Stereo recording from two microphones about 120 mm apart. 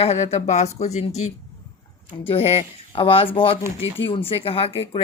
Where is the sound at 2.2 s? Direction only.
55° left (ahead or behind).